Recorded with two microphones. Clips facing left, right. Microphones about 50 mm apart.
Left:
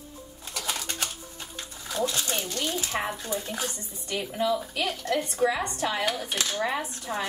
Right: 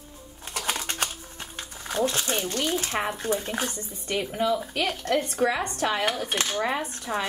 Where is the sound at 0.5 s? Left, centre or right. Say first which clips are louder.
Right 3 dB; right.